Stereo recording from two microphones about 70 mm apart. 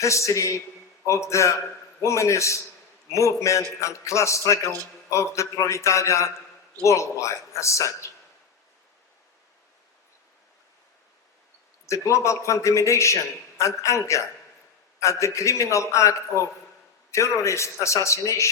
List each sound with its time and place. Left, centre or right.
0.0 s a man's voice: left
11.9 s a man's voice: left